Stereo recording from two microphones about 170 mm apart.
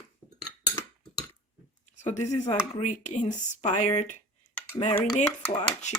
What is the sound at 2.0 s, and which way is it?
Speech, 45° left (ahead or behind).